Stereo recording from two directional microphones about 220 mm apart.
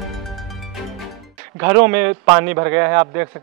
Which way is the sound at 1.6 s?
10° right (ahead or behind).